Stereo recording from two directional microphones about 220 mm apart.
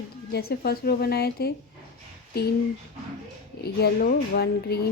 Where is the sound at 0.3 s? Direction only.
45° left (ahead or behind).